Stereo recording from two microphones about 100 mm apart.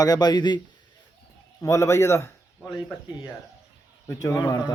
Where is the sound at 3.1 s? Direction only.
45° left (ahead or behind).